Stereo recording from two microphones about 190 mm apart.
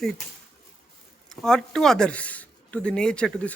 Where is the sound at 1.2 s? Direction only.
5° left (ahead or behind).